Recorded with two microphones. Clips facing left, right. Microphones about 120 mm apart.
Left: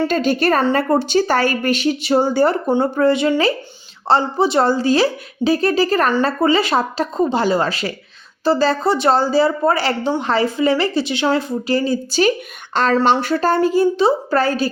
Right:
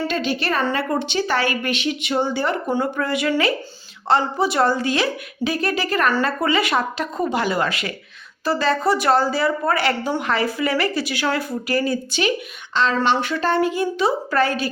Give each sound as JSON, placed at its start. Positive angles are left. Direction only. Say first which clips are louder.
{"t": 0.1, "sound": "a woman's voice", "louder": "left 6 dB", "side_deg": 45}
{"t": 12.7, "sound": "a woman's voice", "louder": "left 4 dB", "side_deg": 45}